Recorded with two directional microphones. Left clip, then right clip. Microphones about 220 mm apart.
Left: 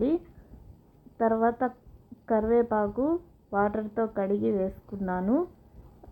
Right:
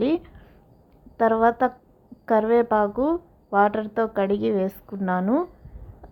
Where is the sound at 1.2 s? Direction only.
25° right (ahead or behind).